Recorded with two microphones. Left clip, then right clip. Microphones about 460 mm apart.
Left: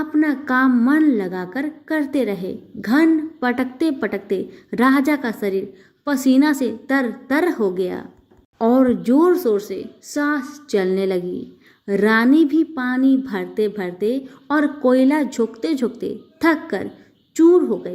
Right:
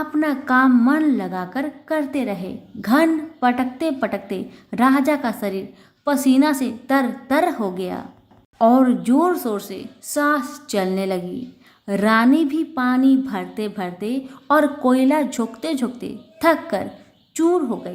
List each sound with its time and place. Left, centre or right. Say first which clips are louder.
0.0 s a woman's voice: left 2 dB; centre